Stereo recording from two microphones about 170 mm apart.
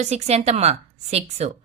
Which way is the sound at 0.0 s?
40° right (ahead or behind).